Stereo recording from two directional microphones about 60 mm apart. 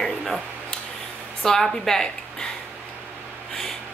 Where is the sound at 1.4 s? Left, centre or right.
Centre.